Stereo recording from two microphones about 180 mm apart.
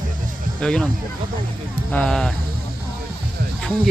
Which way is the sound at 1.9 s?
5° left (ahead or behind).